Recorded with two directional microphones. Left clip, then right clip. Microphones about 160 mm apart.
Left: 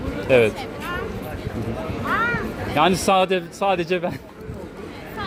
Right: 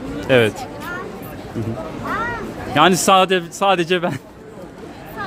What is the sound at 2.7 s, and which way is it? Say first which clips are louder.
Speech: right 5 dB; 55° right (ahead or behind).